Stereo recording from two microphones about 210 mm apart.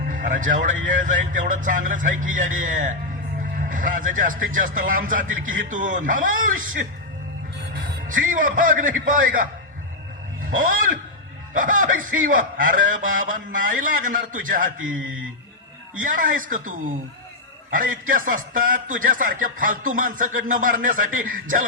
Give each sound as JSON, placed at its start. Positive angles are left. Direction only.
{"t": 0.0, "sound": "a man's voice", "side_deg": -40}